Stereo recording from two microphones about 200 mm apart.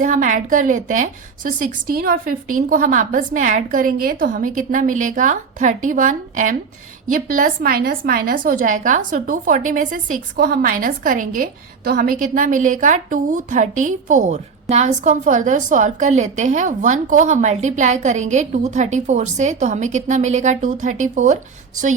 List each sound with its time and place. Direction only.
0.0 s a woman's voice: 40° right (ahead or behind)